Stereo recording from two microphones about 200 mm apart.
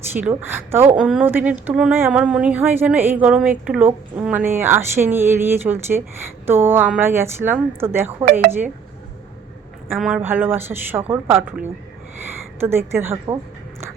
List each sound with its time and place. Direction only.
0.1 s speech: 10° right (ahead or behind)
9.9 s speech: 5° right (ahead or behind)